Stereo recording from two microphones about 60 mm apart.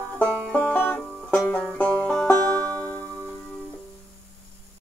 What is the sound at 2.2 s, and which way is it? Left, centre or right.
Music, left.